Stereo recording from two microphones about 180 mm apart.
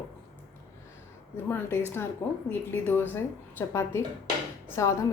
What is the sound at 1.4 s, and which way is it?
A man's voice, 10° left (ahead or behind).